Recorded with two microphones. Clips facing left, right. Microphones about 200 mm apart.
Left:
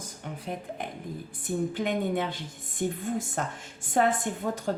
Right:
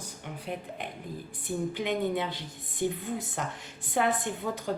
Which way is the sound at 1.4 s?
50° left (ahead or behind).